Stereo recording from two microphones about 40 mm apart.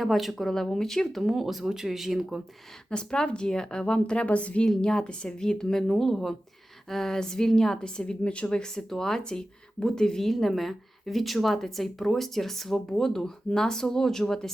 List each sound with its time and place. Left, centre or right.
0.0 s a woman's voice: centre
1.2 s speech: centre
2.9 s a woman's voice: left
10.3 s a woman's voice: centre